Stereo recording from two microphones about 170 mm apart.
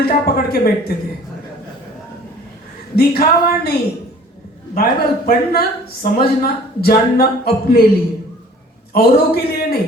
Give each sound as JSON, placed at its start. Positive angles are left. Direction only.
{"t": 0.0, "sound": "speech", "side_deg": 65}
{"t": 2.9, "sound": "speech", "side_deg": 65}
{"t": 4.7, "sound": "speech", "side_deg": 55}
{"t": 8.9, "sound": "speech", "side_deg": 65}